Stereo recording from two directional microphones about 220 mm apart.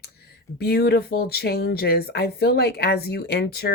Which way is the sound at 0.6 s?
45° left (ahead or behind).